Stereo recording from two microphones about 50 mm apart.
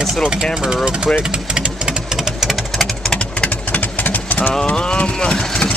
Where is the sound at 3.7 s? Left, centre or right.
Left.